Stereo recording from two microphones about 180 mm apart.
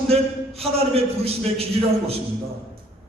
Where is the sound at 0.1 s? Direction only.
35° right (ahead or behind).